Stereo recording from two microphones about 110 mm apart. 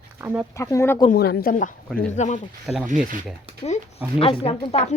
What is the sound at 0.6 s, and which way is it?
Speech, 25° left (ahead or behind).